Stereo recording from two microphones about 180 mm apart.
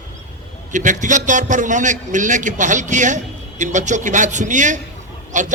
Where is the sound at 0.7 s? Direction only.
45° right (ahead or behind).